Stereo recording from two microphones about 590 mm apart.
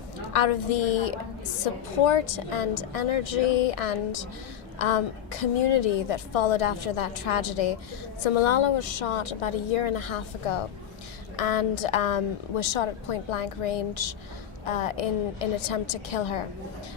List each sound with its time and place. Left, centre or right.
0.3 s a woman's voice: left
11.3 s a woman's voice: left